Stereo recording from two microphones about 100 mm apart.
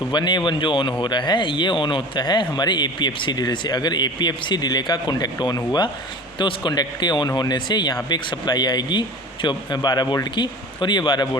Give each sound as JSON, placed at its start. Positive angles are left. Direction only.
{"t": 0.1, "sound": "speech", "side_deg": 50}